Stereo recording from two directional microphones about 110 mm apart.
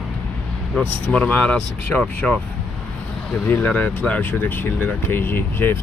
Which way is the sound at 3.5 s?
15° left (ahead or behind).